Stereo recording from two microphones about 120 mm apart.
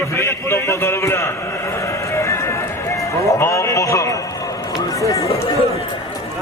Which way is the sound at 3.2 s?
25° left (ahead or behind).